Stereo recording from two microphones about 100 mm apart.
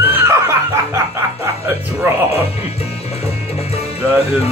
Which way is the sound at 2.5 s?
90° left.